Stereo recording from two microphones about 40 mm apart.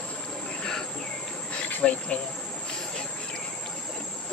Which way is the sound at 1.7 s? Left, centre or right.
Left.